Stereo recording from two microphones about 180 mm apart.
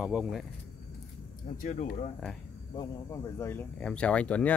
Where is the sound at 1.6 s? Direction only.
45° left (ahead or behind).